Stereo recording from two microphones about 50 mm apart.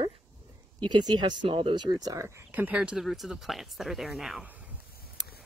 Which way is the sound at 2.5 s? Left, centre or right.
Right.